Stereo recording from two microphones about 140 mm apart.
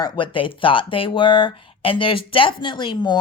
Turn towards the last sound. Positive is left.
turn(degrees=30)  # may be behind; listen again after turning